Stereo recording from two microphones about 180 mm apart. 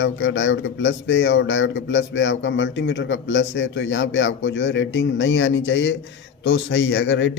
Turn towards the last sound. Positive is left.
turn(degrees=80)